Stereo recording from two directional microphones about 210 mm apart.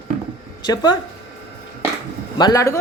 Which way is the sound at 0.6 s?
20° left (ahead or behind).